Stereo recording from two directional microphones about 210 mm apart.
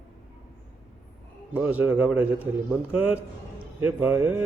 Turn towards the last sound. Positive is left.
turn(degrees=-10)  # may be behind; listen again after turning